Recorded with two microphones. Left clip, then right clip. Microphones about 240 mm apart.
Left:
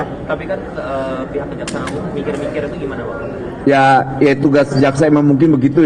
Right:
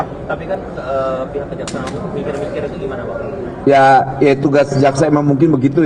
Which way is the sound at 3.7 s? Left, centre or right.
Left.